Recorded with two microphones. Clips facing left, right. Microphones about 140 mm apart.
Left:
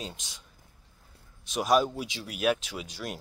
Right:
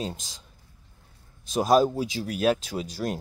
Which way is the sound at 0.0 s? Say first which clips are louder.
Right 7 dB; 40° right (ahead or behind).